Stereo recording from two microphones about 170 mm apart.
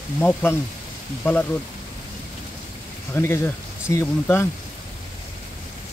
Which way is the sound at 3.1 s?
15° left (ahead or behind).